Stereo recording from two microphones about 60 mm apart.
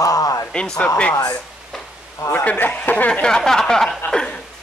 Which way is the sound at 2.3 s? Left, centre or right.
Left.